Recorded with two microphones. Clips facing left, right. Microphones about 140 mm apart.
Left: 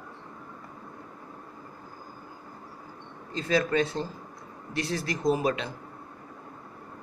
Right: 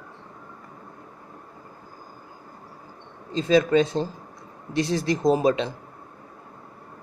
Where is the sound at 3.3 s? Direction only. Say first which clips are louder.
Right 7 dB; 20° right (ahead or behind).